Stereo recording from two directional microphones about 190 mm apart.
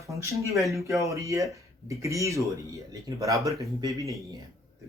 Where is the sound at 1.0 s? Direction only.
15° right (ahead or behind).